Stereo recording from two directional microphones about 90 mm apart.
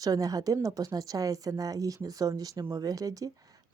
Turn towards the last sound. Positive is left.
turn(degrees=-40)  # may be behind; listen again after turning